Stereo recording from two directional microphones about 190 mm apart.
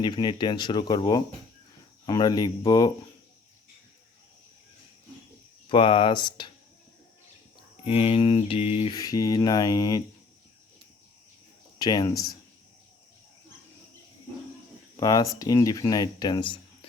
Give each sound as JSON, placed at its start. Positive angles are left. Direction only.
{"t": 0.0, "sound": "mantra", "side_deg": 25}
{"t": 5.6, "sound": "mantra", "side_deg": 25}
{"t": 7.9, "sound": "mantra", "side_deg": 30}
{"t": 11.8, "sound": "mantra", "side_deg": 20}
{"t": 14.9, "sound": "mantra", "side_deg": 20}